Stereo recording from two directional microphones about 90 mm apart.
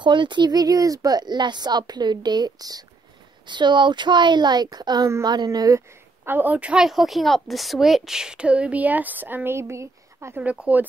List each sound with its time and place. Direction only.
0.0 s speech: 60° right (ahead or behind)
3.4 s speech: 60° right (ahead or behind)
6.2 s a woman's voice: 20° right (ahead or behind)
10.4 s a woman's voice: 15° right (ahead or behind)